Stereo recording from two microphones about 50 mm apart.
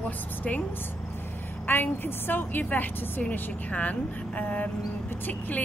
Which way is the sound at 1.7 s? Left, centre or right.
Left.